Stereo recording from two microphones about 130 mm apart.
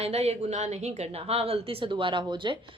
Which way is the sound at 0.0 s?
55° right (ahead or behind).